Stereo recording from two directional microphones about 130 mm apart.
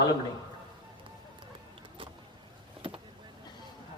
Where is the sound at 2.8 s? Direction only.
45° right (ahead or behind).